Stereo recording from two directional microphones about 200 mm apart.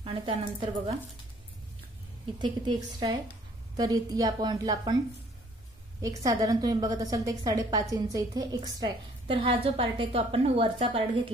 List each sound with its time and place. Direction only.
0.0 s a woman's voice: 25° right (ahead or behind)
2.4 s a woman's voice: 25° right (ahead or behind)
5.9 s a woman's voice: 15° right (ahead or behind)